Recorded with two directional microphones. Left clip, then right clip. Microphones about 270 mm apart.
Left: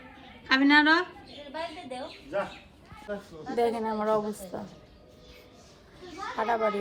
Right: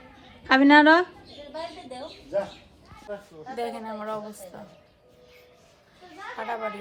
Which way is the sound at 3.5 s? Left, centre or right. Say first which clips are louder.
Left 5 dB; centre.